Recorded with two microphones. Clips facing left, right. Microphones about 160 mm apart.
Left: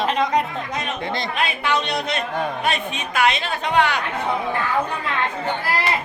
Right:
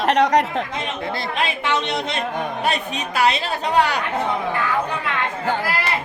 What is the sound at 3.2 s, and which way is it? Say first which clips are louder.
Speech: right 1 dB; 35° right (ahead or behind).